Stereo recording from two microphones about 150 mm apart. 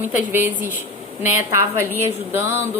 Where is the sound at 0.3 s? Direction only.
15° right (ahead or behind).